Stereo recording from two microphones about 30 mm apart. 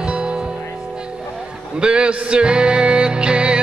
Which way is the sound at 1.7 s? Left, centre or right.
Right.